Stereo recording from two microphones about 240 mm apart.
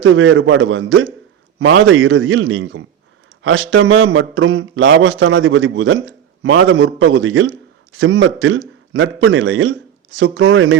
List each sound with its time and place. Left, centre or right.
0.0 s a man's voice: right